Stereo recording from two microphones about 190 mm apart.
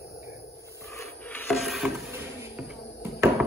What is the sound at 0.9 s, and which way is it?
Wood, 15° left (ahead or behind).